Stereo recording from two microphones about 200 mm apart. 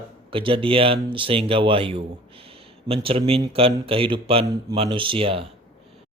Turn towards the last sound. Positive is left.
turn(degrees=-25)  # may be behind; listen again after turning